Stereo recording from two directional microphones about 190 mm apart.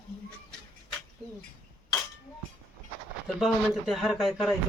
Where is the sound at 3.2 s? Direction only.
Centre (ahead or behind).